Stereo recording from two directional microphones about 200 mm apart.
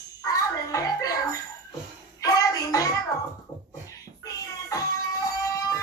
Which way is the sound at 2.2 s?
20° left (ahead or behind).